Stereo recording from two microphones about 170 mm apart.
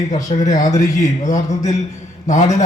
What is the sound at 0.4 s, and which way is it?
Speech, 45° left (ahead or behind).